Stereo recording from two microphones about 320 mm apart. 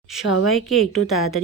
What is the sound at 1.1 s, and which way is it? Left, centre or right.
Speech, left.